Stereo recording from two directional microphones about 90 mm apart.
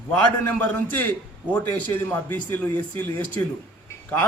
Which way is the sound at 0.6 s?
20° left (ahead or behind).